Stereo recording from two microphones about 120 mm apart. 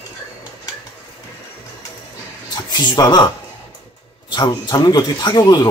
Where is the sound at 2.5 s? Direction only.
35° left (ahead or behind).